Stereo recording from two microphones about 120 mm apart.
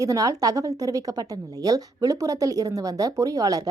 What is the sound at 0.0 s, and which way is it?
Speech, 30° right (ahead or behind).